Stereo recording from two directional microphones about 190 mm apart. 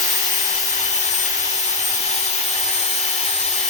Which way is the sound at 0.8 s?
40° left (ahead or behind).